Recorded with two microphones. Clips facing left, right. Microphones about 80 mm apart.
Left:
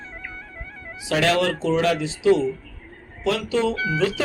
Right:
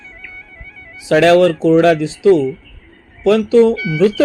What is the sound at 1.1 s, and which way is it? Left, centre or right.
Speech, right.